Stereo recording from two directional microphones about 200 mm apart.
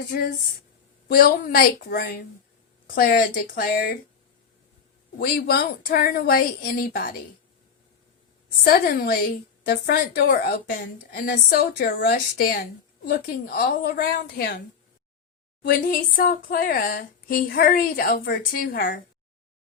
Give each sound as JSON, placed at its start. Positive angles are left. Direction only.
{"t": 1.0, "sound": "a woman's voice", "side_deg": 50}
{"t": 5.2, "sound": "a woman's voice", "side_deg": 50}
{"t": 8.6, "sound": "a woman's voice", "side_deg": 50}
{"t": 15.7, "sound": "a woman's voice", "side_deg": 45}